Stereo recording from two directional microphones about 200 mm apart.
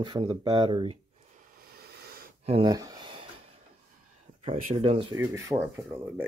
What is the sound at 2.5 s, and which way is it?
Speech, 25° right (ahead or behind).